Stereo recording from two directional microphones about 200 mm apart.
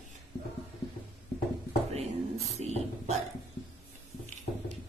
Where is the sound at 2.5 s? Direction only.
35° right (ahead or behind).